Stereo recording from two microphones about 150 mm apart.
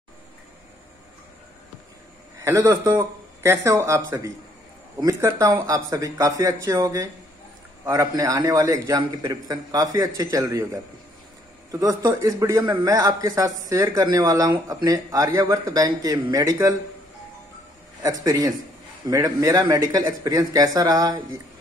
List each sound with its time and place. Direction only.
2.4 s a man's voice: 20° right (ahead or behind)
18.0 s a man's voice: 25° right (ahead or behind)